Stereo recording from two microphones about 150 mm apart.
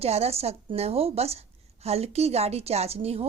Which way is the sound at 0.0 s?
45° right (ahead or behind).